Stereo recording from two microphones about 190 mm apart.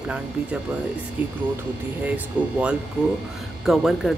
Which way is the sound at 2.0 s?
5° right (ahead or behind).